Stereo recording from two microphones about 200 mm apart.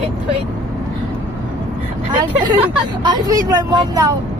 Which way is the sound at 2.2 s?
20° right (ahead or behind).